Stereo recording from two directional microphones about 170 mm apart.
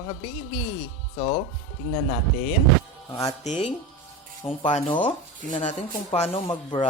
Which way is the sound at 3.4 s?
45° left (ahead or behind).